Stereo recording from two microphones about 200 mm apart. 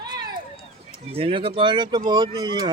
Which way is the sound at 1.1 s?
25° right (ahead or behind).